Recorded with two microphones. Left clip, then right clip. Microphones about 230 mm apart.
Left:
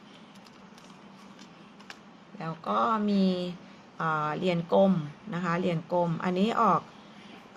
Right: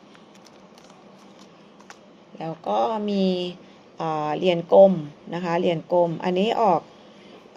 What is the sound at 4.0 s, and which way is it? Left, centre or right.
Speech, left.